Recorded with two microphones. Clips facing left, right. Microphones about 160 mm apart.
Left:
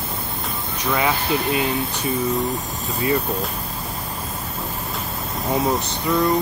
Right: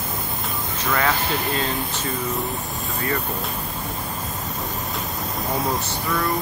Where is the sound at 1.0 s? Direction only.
15° left (ahead or behind).